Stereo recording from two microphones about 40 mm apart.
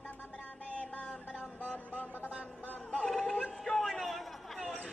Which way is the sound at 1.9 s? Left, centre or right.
Right.